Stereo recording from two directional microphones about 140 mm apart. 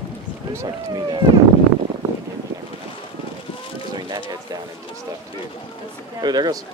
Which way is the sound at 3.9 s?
30° right (ahead or behind).